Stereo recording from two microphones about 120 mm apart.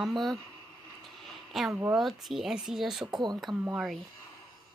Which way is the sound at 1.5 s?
Centre (ahead or behind).